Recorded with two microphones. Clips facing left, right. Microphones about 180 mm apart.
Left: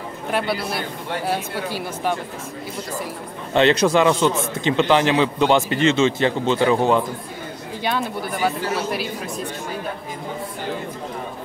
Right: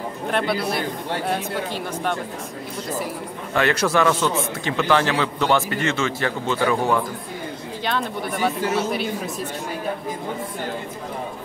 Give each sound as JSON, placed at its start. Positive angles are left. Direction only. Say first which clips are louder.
{"t": 0.3, "sound": "speech", "louder": "right 1 dB", "side_deg": 5}
{"t": 3.5, "sound": "a man's voice", "louder": "left 4 dB", "side_deg": 20}
{"t": 7.8, "sound": "speech", "louder": "left 1 dB", "side_deg": 10}